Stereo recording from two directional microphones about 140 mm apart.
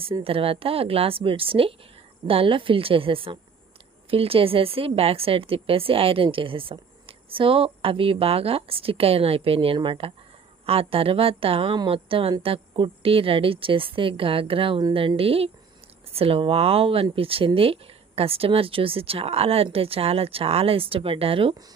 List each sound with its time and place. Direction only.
0.0 s a woman's voice: 40° right (ahead or behind)